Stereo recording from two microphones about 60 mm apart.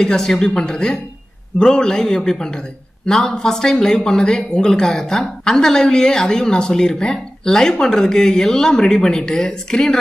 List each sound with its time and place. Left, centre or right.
0.0 s speech: centre